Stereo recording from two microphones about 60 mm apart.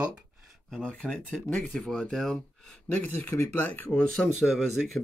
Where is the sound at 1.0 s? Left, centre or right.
Centre.